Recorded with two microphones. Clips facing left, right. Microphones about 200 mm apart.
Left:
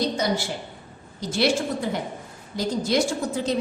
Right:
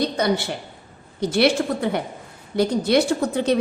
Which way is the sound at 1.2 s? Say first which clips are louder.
Right 4 dB; 60° right (ahead or behind).